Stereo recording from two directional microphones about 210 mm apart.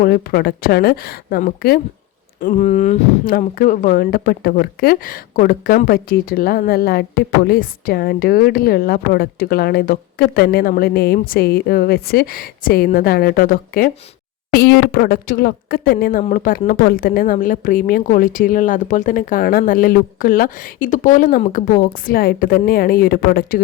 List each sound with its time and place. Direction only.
0.0 s a woman's voice: 45° left (ahead or behind)